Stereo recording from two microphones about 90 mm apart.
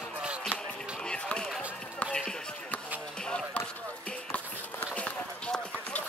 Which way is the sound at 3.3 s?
10° left (ahead or behind).